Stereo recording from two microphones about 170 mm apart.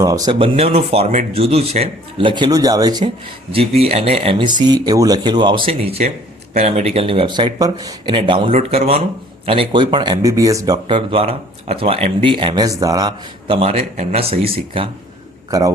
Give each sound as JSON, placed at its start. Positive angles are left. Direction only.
{"t": 0.0, "sound": "speech", "side_deg": -20}
{"t": 3.5, "sound": "speech", "side_deg": -35}
{"t": 15.4, "sound": "a man's voice", "side_deg": -20}